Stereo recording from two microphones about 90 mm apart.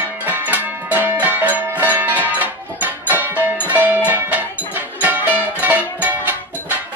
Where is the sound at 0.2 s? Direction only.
20° right (ahead or behind).